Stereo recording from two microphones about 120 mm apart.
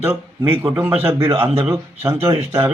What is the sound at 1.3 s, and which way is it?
Speech, 50° right (ahead or behind).